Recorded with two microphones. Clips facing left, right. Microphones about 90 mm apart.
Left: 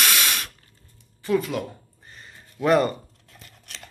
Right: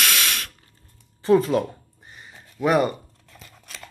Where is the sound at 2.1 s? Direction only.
15° right (ahead or behind).